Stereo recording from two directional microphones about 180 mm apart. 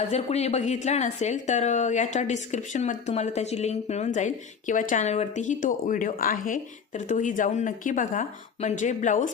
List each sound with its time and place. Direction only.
0.1 s a woman's voice: 35° left (ahead or behind)